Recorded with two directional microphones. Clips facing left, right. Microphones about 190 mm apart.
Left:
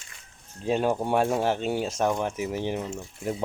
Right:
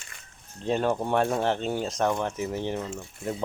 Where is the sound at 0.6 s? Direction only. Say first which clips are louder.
Left 1 dB; 10° left (ahead or behind).